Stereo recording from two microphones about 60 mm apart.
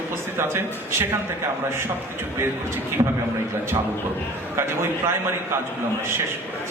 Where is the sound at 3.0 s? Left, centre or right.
Right.